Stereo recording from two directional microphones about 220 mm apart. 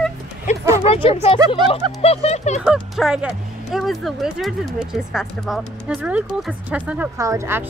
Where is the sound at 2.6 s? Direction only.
5° right (ahead or behind).